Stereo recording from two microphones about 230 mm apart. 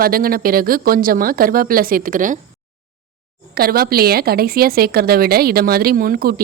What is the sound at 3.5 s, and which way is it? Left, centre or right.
Speech, right.